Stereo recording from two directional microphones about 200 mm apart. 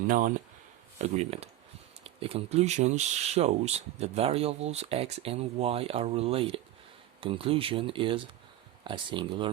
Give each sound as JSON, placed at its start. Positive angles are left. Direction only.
{"t": 0.1, "sound": "speech", "side_deg": -40}